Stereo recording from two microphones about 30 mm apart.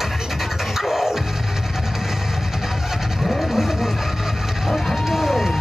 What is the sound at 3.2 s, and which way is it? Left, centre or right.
Vehicle, centre.